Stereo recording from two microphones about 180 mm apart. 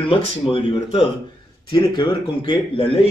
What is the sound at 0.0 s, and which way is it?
Speech, 30° left (ahead or behind).